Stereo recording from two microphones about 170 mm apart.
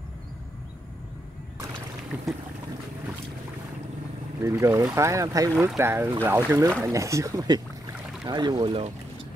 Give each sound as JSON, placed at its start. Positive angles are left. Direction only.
{"t": 4.4, "sound": "speech", "side_deg": -15}